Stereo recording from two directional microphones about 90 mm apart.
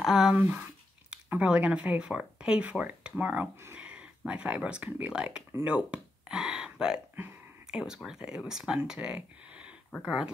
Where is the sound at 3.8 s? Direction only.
10° right (ahead or behind).